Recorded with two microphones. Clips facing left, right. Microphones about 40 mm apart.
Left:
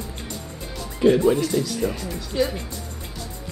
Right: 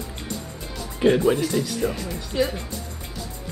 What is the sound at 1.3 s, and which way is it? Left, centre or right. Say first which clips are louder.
Speech: left 1 dB; centre.